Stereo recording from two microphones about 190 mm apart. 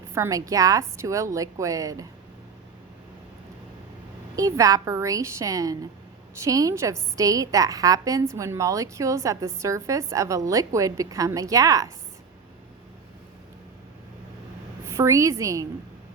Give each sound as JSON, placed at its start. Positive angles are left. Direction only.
{"t": 0.1, "sound": "a woman's voice", "side_deg": -15}
{"t": 4.4, "sound": "a woman's voice", "side_deg": -15}
{"t": 14.8, "sound": "a woman's voice", "side_deg": -15}